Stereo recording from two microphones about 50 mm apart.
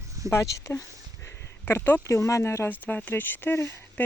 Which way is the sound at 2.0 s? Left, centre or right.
Left.